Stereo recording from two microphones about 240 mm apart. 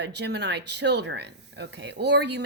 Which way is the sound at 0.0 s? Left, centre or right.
Right.